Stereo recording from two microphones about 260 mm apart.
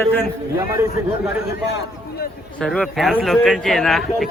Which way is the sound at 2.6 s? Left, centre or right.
Centre.